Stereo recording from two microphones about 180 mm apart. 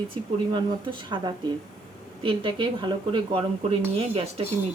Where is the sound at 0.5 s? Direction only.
25° right (ahead or behind).